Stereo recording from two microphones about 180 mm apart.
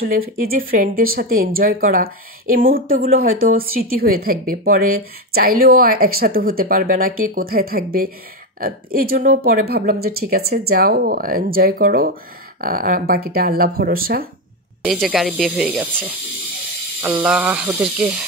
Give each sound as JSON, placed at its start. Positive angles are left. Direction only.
{"t": 0.0, "sound": "speech", "side_deg": -55}
{"t": 14.9, "sound": "speech", "side_deg": 0}
{"t": 17.0, "sound": "speech", "side_deg": -10}